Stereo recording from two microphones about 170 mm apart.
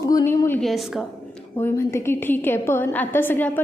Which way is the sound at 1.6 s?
15° left (ahead or behind).